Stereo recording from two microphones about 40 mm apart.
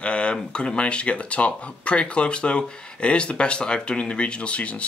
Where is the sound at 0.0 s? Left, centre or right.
Left.